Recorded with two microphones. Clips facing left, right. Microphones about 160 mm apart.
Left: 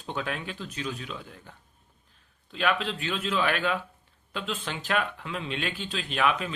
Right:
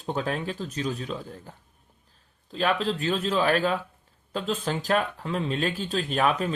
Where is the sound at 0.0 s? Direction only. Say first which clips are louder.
Right 5 dB; 35° right (ahead or behind).